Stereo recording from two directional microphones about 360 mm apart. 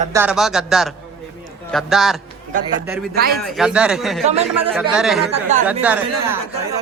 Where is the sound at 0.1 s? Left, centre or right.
Centre.